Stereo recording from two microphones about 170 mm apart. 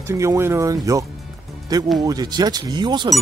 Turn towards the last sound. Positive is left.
turn(degrees=-25)  # may be behind; listen again after turning